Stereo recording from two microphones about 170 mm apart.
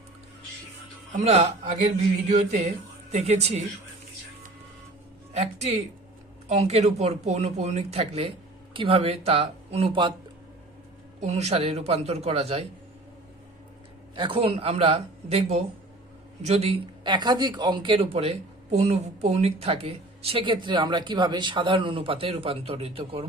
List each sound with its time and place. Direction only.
1.1 s a man's voice: 40° right (ahead or behind)
5.3 s a man's voice: 40° right (ahead or behind)
11.2 s a man's voice: 40° right (ahead or behind)
14.2 s a man's voice: 30° right (ahead or behind)